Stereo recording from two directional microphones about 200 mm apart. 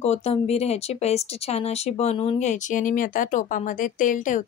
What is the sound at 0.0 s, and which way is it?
Speech, 30° left (ahead or behind).